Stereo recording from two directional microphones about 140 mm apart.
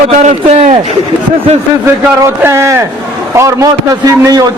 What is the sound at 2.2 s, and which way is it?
A man's voice, 20° right (ahead or behind).